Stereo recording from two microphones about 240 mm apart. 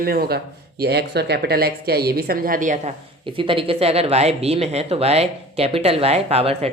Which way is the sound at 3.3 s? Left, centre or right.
Right.